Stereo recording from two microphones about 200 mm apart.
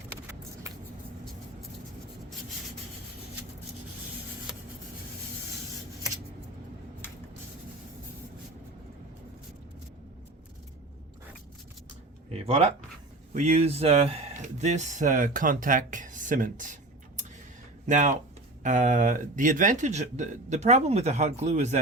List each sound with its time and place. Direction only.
12.5 s speech: 30° right (ahead or behind)
17.8 s speech: 40° right (ahead or behind)